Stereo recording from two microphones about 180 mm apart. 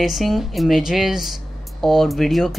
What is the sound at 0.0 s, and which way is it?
Speech, centre (ahead or behind).